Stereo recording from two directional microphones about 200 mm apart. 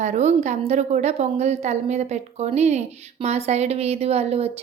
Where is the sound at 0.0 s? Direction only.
35° right (ahead or behind).